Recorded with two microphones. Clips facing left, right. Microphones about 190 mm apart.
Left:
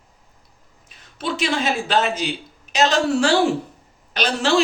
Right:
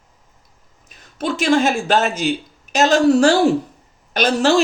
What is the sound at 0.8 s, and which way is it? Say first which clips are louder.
A man's voice: right 4 dB; 45° right (ahead or behind).